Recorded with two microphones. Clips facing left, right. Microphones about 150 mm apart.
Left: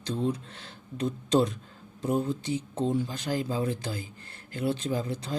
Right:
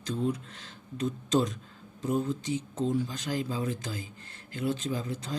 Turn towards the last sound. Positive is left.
turn(degrees=30)  # may be behind; listen again after turning